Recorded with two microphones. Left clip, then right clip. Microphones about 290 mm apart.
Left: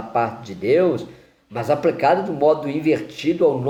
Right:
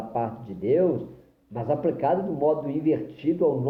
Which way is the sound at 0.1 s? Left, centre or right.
Left.